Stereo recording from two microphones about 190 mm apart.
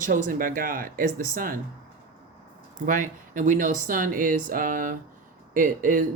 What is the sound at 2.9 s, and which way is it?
Speech, 45° right (ahead or behind).